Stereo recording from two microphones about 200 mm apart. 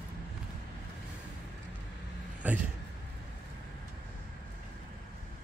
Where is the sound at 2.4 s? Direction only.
10° right (ahead or behind).